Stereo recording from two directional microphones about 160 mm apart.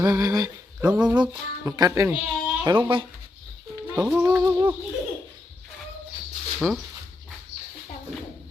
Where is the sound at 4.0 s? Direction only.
10° right (ahead or behind).